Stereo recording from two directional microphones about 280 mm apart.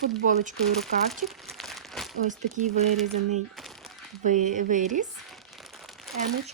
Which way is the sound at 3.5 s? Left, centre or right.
Centre.